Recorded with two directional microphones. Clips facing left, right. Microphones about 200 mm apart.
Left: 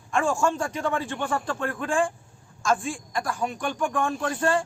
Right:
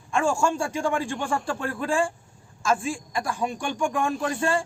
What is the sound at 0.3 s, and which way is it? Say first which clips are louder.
A man's voice: right 2 dB; 10° right (ahead or behind).